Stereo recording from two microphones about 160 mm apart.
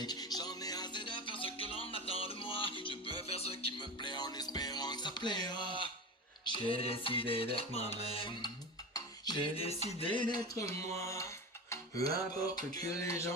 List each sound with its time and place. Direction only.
0.0 s music: 25° left (ahead or behind)
8.9 s music: 25° left (ahead or behind)
9.6 s music: 40° left (ahead or behind); by 12.5 s 20° left (ahead or behind)
12.7 s a sound: 20° left (ahead or behind)